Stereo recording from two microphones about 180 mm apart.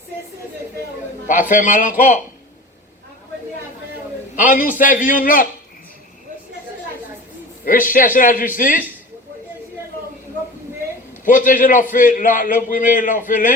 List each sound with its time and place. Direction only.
1.3 s a man's voice: 45° left (ahead or behind)
4.4 s a man's voice: 50° left (ahead or behind)
7.6 s a man's voice: 50° left (ahead or behind)
11.3 s a man's voice: 50° left (ahead or behind)